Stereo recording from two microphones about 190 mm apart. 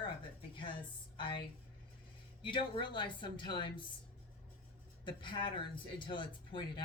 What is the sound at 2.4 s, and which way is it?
Speech, 25° left (ahead or behind).